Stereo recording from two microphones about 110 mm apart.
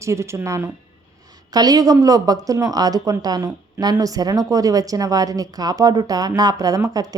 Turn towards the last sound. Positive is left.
turn(degrees=-35)  # may be behind; listen again after turning